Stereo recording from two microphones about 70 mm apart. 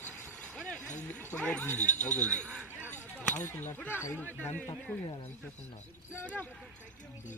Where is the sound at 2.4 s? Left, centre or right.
Centre.